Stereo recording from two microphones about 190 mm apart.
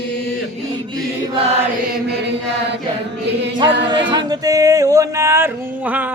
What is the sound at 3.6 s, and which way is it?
A capella, 65° right (ahead or behind).